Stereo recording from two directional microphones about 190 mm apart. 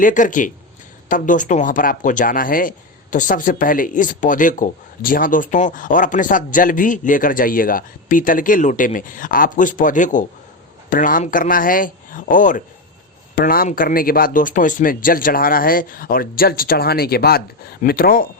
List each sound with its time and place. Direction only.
0.0 s speech: 45° left (ahead or behind)